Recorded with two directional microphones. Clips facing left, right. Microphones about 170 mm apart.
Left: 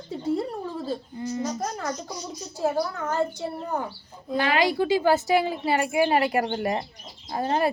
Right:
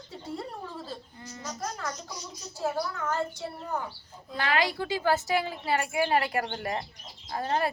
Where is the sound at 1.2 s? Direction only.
20° left (ahead or behind).